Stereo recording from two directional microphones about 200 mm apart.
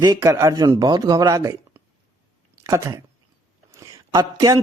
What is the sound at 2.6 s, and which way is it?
Speech, 15° right (ahead or behind).